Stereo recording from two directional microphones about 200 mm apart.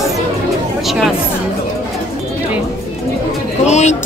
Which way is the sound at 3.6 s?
35° left (ahead or behind).